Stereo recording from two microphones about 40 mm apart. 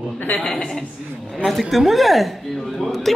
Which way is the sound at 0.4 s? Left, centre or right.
Centre.